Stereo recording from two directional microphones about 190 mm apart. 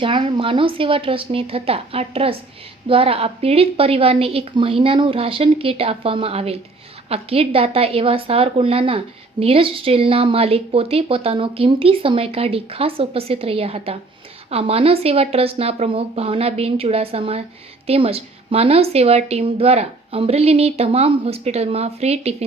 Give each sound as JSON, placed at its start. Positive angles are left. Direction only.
{"t": 0.0, "sound": "a woman's voice", "side_deg": -25}